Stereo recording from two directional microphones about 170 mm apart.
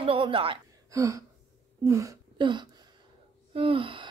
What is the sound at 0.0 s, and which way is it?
Speech, 30° right (ahead or behind).